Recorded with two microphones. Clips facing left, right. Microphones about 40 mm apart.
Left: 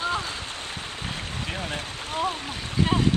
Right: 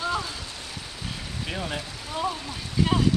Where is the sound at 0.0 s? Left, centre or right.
Left.